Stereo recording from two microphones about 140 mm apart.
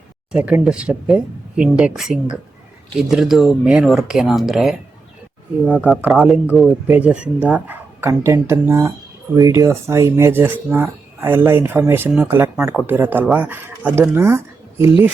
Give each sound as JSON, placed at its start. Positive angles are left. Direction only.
{"t": 0.3, "sound": "speech", "side_deg": -10}
{"t": 3.0, "sound": "speech", "side_deg": 0}